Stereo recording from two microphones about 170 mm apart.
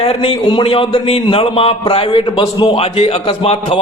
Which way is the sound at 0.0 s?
35° left (ahead or behind).